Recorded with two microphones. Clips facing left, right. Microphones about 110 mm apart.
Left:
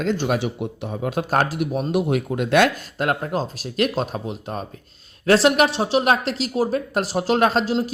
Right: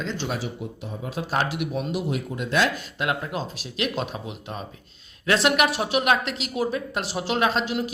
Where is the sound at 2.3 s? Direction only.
60° left (ahead or behind).